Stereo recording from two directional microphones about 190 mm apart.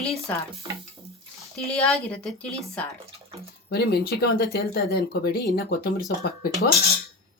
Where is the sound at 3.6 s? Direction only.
60° left (ahead or behind).